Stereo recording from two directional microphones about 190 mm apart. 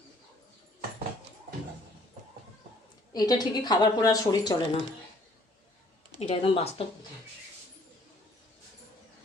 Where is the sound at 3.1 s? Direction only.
20° left (ahead or behind).